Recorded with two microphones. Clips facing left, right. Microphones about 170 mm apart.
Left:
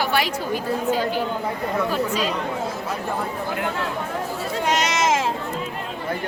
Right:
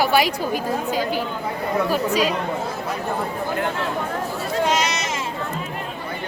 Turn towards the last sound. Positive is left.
turn(degrees=90)